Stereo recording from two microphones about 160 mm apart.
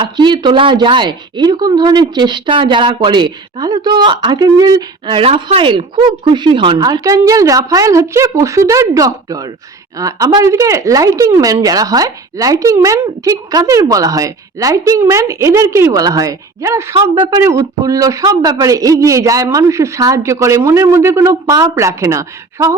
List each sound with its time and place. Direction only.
0.0 s speech: 30° right (ahead or behind)
16.9 s speech: 30° right (ahead or behind)
17.4 s speech: 20° right (ahead or behind)